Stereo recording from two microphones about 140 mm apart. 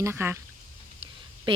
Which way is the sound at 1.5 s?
35° right (ahead or behind).